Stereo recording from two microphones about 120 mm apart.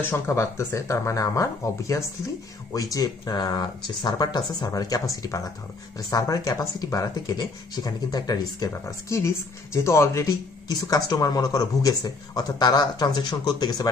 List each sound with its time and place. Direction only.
0.0 s speech: 20° left (ahead or behind)